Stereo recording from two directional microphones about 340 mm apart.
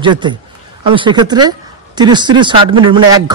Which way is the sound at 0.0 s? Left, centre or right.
Centre.